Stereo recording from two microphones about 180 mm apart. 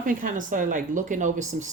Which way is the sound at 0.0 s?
50° right (ahead or behind).